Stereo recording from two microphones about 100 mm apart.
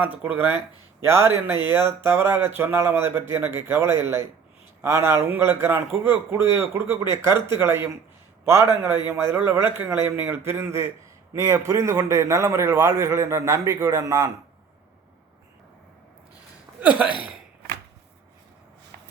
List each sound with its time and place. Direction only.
0.0 s a man's voice: 15° right (ahead or behind); by 14.3 s 35° right (ahead or behind)